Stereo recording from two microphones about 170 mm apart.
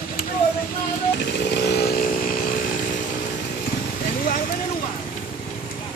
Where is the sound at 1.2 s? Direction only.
75° left (ahead or behind); by 2.6 s 55° left (ahead or behind).